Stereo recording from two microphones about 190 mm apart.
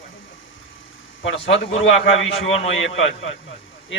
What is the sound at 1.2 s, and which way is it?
A man's voice, 85° left.